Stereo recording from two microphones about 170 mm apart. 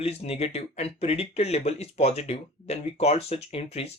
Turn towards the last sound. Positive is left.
turn(degrees=35)  # may be behind; listen again after turning